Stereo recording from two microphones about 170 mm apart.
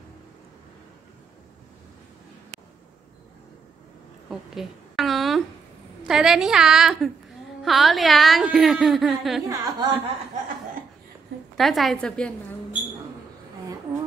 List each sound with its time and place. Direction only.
4.3 s a sound: centre (ahead or behind)
6.0 s a woman's voice: 5° right (ahead or behind)
9.5 s speech: 25° right (ahead or behind)
11.5 s a woman's voice: centre (ahead or behind)